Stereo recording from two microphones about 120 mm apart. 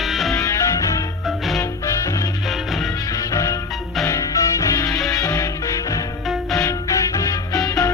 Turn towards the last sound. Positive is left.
turn(degrees=30)  # may be behind; listen again after turning